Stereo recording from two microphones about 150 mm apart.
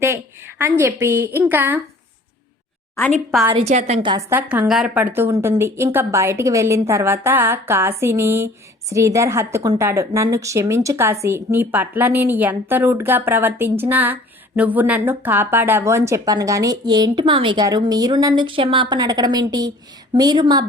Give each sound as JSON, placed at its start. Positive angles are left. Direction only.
{"t": 0.6, "sound": "a woman's voice", "side_deg": -15}
{"t": 2.9, "sound": "a woman's voice", "side_deg": 10}
{"t": 3.5, "sound": "a woman's voice", "side_deg": -50}
{"t": 4.3, "sound": "a woman's voice", "side_deg": -10}